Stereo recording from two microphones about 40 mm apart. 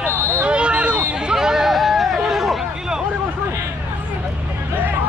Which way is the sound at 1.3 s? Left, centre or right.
Centre.